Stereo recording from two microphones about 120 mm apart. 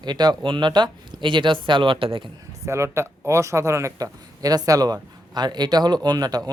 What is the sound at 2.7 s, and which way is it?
A man's voice, 25° right (ahead or behind).